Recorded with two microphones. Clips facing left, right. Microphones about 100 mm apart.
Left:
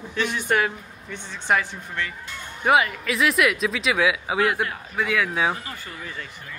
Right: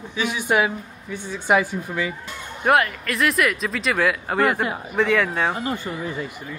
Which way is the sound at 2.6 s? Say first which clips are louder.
Right 1 dB; centre (ahead or behind).